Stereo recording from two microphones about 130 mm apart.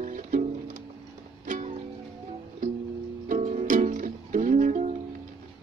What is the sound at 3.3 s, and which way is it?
Music, 65° right (ahead or behind).